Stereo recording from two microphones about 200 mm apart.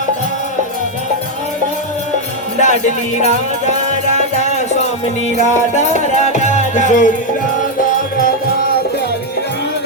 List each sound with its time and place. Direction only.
2.6 s music: 35° left (ahead or behind)
6.2 s music: 35° left (ahead or behind)